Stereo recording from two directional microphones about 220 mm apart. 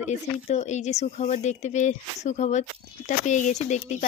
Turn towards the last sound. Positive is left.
turn(degrees=30)  # may be behind; listen again after turning